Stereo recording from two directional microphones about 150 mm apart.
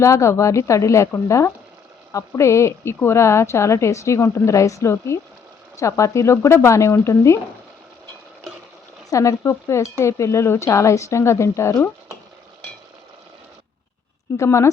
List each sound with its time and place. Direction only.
0.0 s a woman's voice: 20° left (ahead or behind)
9.0 s a woman's voice: 20° left (ahead or behind)
14.3 s a woman's voice: 20° left (ahead or behind)